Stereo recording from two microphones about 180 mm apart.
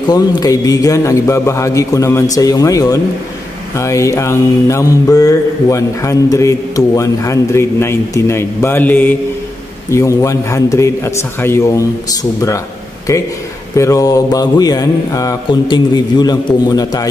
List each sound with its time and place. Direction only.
0.1 s speech: 20° left (ahead or behind)
2.3 s mantra: 20° left (ahead or behind)
3.7 s speech: 15° left (ahead or behind)
13.7 s mantra: 20° left (ahead or behind)